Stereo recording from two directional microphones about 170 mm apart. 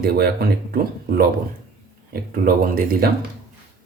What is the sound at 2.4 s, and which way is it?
Speech, 55° right (ahead or behind).